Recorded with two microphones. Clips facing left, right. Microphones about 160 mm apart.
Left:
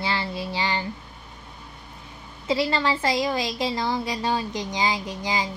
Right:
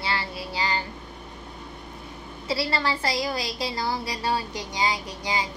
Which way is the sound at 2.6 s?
25° left (ahead or behind).